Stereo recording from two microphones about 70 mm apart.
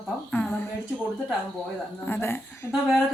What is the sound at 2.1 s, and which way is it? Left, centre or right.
Speech, left.